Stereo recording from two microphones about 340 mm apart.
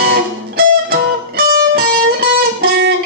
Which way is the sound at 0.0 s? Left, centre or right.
Right.